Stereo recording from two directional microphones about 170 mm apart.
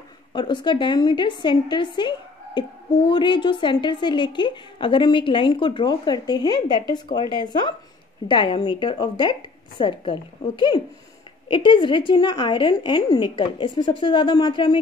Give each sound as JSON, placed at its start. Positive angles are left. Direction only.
{"t": 0.3, "sound": "a woman's voice", "side_deg": 25}
{"t": 2.0, "sound": "a sound", "side_deg": 25}
{"t": 3.1, "sound": "a woman's voice", "side_deg": 25}